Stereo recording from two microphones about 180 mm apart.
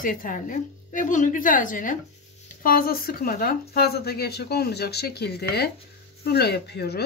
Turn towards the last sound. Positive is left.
turn(degrees=65)  # may be behind; listen again after turning